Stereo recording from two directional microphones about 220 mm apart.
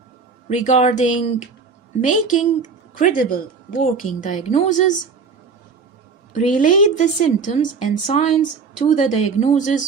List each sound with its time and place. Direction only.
0.4 s a woman's voice: 30° left (ahead or behind)
6.3 s a woman's voice: 35° left (ahead or behind)